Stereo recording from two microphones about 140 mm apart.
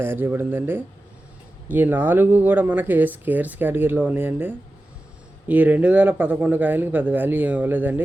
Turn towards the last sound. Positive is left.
turn(degrees=-15)  # may be behind; listen again after turning